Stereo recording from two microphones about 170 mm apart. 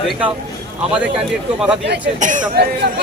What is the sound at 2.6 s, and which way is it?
Speech, 75° right (ahead or behind).